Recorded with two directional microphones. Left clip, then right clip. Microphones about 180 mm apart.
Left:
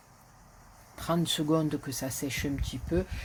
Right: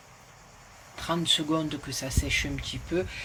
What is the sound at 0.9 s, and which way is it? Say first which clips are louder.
Speech: right 4 dB; 60° left (ahead or behind).